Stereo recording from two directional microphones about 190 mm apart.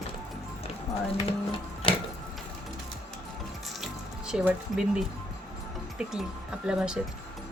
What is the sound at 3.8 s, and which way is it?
Music, 5° right (ahead or behind).